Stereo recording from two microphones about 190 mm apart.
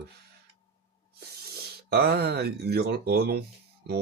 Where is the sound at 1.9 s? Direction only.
60° right (ahead or behind).